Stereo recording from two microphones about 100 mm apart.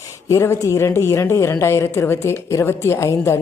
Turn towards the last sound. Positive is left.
turn(degrees=30)  # may be behind; listen again after turning